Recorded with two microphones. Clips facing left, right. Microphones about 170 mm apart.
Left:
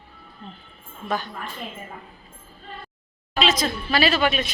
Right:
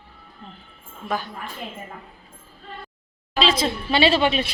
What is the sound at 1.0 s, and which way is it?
Speech, 10° right (ahead or behind).